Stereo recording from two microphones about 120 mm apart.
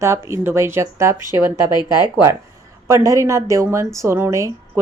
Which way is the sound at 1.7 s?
35° left (ahead or behind).